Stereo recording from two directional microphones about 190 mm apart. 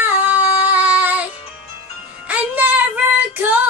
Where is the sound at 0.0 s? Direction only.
10° right (ahead or behind).